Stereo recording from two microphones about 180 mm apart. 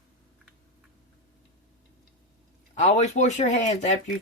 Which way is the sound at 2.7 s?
40° left (ahead or behind).